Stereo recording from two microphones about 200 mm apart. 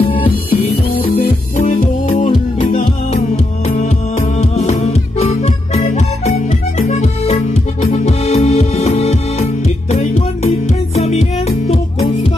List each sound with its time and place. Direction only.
0.0 s music: 25° left (ahead or behind)
0.9 s music: 45° left (ahead or behind); by 3.2 s 30° left (ahead or behind)
4.4 s music: 35° left (ahead or behind)